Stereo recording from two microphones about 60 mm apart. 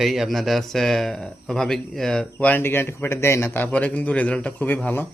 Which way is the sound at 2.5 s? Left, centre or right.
Left.